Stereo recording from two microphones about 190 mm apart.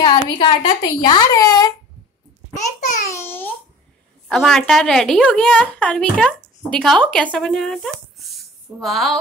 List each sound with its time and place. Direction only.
0.0 s a woman's voice: 25° left (ahead or behind)
3.1 s babbling: 10° left (ahead or behind)
4.3 s a woman's voice: centre (ahead or behind)